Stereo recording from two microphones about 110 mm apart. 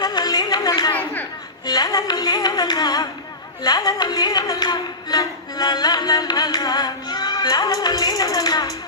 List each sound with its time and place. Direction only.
0.0 s a sound: 40° left (ahead or behind)
1.6 s carnatic music: 35° left (ahead or behind)
3.6 s speech: 35° left (ahead or behind)